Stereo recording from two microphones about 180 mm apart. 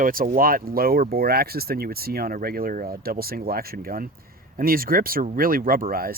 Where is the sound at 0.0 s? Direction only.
50° right (ahead or behind).